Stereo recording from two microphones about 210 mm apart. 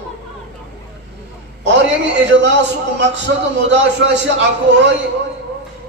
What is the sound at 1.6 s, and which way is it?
A man's voice, 55° right (ahead or behind).